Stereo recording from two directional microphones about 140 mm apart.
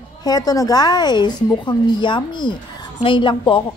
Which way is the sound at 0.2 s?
25° left (ahead or behind).